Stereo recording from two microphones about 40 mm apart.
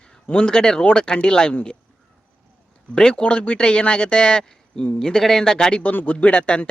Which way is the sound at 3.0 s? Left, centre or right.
Left.